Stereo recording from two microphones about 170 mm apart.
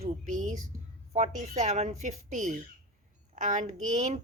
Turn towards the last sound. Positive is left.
turn(degrees=-45)  # may be behind; listen again after turning